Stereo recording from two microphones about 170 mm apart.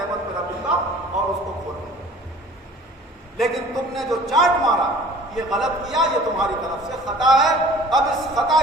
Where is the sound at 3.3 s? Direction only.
Centre (ahead or behind).